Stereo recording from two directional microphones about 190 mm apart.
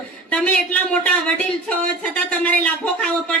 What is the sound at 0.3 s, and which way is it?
Speech, 5° left (ahead or behind).